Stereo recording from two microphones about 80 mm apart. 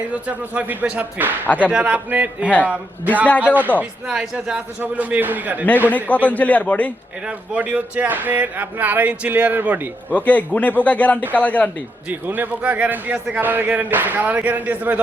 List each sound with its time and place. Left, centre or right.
0.1 s speech: centre
1.5 s a man's voice: centre
1.7 s a man's voice: centre
3.2 s speech: centre
4.0 s a man's voice: centre
6.1 s a man's voice: left
7.3 s speech: centre
10.1 s a man's voice: centre
12.0 s speech: centre